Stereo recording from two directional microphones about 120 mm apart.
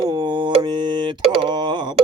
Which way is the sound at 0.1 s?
40° right (ahead or behind).